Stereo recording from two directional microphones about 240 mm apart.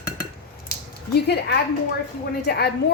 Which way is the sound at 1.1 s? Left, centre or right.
Left.